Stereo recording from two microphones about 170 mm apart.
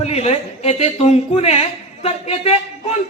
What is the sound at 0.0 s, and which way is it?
Speech, 40° left (ahead or behind).